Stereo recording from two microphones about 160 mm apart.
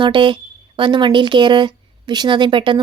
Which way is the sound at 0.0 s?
30° right (ahead or behind).